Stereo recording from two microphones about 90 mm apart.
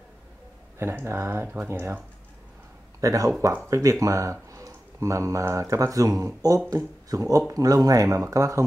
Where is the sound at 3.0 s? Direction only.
35° right (ahead or behind).